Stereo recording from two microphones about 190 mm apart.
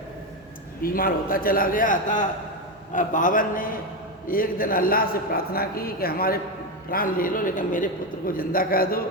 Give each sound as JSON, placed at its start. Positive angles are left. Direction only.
{"t": 0.8, "sound": "a man's voice", "side_deg": 50}